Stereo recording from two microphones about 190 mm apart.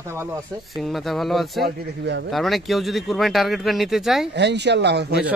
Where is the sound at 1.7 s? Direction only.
65° right (ahead or behind).